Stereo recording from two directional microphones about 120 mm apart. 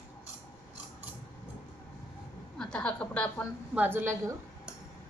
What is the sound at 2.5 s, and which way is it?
Speech, 5° left (ahead or behind).